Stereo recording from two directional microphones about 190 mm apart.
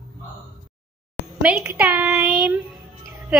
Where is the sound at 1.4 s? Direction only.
5° right (ahead or behind).